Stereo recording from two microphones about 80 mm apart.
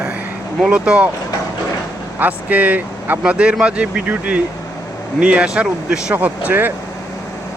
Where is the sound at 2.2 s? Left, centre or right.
Right.